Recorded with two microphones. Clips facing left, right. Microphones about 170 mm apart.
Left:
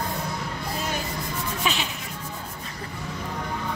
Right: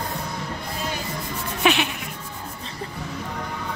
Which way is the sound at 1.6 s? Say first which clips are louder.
Right 9 dB; 65° right (ahead or behind).